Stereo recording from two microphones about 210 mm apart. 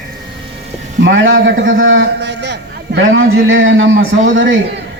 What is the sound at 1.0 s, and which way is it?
A man's voice, 60° right (ahead or behind).